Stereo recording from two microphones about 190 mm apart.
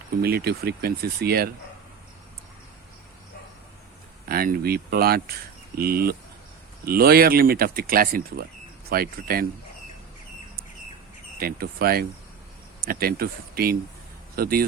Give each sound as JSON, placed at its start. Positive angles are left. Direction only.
{"t": 0.2, "sound": "speech", "side_deg": -55}
{"t": 4.3, "sound": "speech", "side_deg": -50}
{"t": 11.3, "sound": "speech", "side_deg": -55}